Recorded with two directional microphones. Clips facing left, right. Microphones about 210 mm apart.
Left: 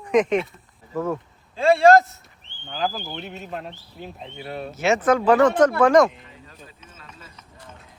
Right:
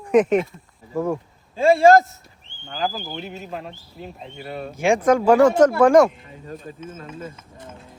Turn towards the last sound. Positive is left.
turn(degrees=-50)  # may be behind; listen again after turning